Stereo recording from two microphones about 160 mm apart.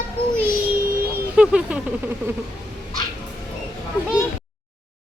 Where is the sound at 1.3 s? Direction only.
5° right (ahead or behind).